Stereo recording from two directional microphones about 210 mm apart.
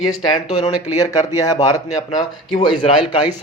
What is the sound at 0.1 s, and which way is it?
Speech, 20° left (ahead or behind).